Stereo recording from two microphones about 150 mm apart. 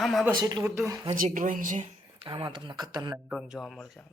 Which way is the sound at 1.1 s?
65° right (ahead or behind).